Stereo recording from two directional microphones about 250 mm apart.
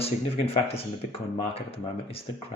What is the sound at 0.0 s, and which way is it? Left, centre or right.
Speech, left.